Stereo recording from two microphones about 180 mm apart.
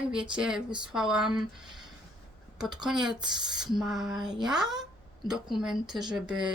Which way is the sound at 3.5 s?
Centre (ahead or behind).